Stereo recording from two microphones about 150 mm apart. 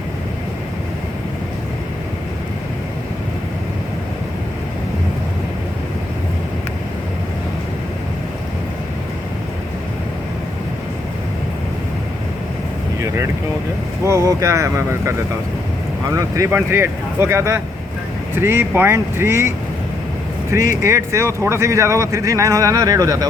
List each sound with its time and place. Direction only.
14.0 s speech: 20° right (ahead or behind)